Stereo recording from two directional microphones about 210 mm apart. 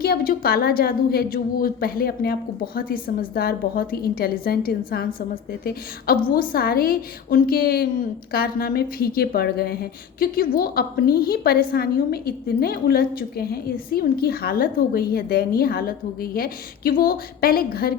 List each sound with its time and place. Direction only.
0.0 s a woman's voice: 45° left (ahead or behind)